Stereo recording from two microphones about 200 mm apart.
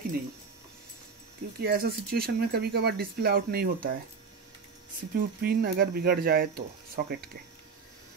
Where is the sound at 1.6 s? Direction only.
50° right (ahead or behind).